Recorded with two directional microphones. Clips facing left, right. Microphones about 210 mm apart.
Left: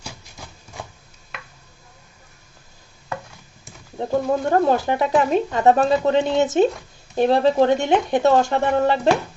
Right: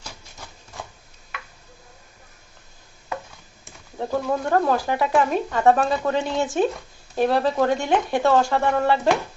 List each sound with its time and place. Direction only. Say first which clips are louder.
3.9 s speech: left 3 dB; 20° left (ahead or behind)